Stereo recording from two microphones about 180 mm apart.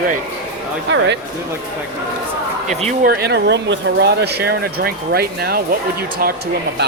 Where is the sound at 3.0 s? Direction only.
65° right (ahead or behind).